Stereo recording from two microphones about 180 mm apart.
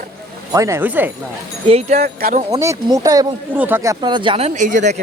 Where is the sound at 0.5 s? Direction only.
15° right (ahead or behind).